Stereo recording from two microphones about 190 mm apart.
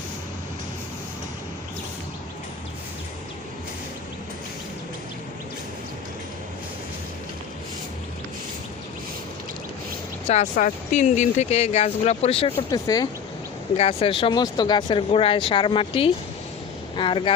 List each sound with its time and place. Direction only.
10.2 s speech: 40° left (ahead or behind)
12.5 s speech: 20° left (ahead or behind)
13.7 s speech: 30° left (ahead or behind)